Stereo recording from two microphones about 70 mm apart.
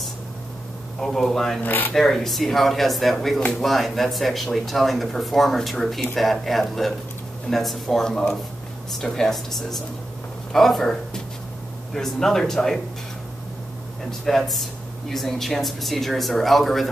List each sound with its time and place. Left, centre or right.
1.0 s speech: centre
1.6 s speech: left
2.0 s speech: centre
14.2 s speech: centre